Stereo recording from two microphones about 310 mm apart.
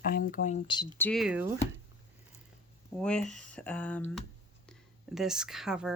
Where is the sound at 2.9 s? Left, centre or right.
Centre.